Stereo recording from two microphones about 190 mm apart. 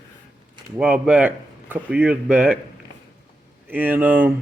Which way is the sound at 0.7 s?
5° right (ahead or behind).